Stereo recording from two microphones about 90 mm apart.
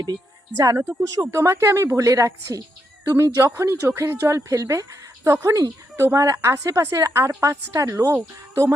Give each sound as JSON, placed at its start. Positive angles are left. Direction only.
{"t": 0.0, "sound": "speech", "side_deg": -45}